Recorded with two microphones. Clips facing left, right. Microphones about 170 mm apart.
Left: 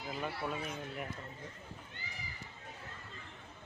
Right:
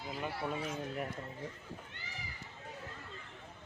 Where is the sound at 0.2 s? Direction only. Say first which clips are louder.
Right 1 dB; 15° right (ahead or behind).